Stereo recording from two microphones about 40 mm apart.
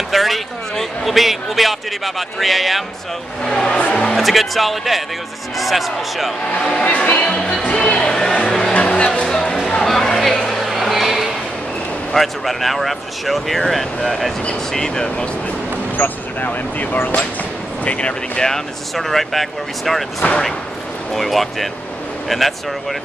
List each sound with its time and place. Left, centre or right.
0.1 s speech: centre
3.4 s speech: centre
3.8 s music: left
4.2 s speech: centre
6.4 s speech: left; by 8.7 s centre
8.9 s speech: left
9.2 s music: centre
9.8 s a sound: centre
12.1 s speech: centre
16.0 s speech: left
17.8 s speech: left
18.5 s speech: centre